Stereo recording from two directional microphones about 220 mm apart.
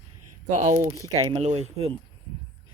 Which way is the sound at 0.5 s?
35° right (ahead or behind).